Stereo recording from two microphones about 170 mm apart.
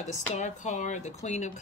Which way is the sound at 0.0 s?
45° left (ahead or behind).